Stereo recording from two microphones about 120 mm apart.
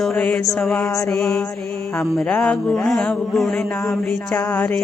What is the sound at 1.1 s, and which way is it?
Speech, 5° left (ahead or behind).